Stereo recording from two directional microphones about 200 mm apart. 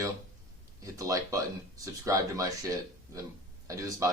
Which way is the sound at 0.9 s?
15° right (ahead or behind).